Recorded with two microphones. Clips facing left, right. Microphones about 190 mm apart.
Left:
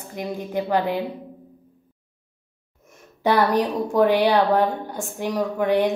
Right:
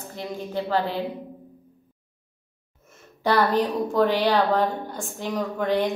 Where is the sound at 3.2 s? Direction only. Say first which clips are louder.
Left 2 dB; 15° left (ahead or behind).